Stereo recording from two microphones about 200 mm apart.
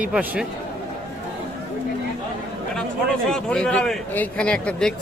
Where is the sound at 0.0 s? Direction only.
5° right (ahead or behind).